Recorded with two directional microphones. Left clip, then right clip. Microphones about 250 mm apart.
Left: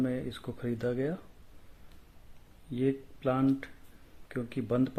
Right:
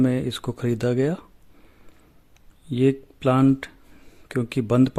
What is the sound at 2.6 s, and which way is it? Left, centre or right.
Speech, right.